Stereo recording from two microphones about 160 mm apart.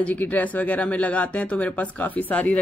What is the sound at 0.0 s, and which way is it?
Speech, 10° left (ahead or behind).